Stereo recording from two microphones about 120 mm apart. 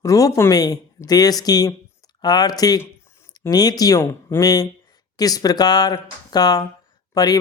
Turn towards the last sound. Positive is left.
turn(degrees=30)  # may be behind; listen again after turning